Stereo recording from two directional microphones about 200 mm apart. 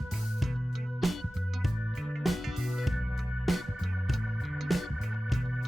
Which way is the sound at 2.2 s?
Centre (ahead or behind).